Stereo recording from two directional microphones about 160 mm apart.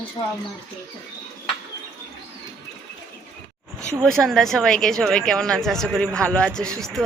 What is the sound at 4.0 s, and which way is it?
A woman's voice, 5° left (ahead or behind).